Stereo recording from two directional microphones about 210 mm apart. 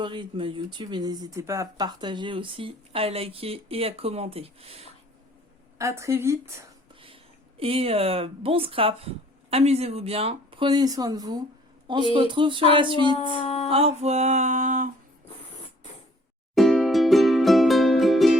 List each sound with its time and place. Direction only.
0.0 s speech: 20° right (ahead or behind)
5.7 s a woman's voice: 15° right (ahead or behind)
7.6 s speech: 25° right (ahead or behind)
13.1 s speech: 25° left (ahead or behind)
13.7 s music: 30° right (ahead or behind)
16.6 s music: centre (ahead or behind)